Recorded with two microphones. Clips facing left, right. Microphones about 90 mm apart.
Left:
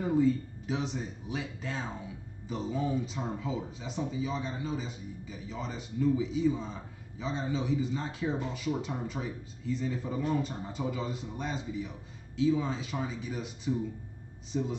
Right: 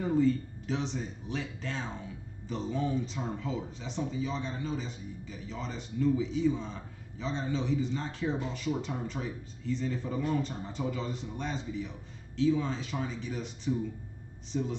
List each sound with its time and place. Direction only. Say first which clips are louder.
0.0 s speech: even; 10° left (ahead or behind)